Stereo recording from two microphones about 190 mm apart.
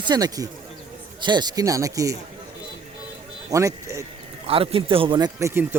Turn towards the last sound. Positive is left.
turn(degrees=-10)  # may be behind; listen again after turning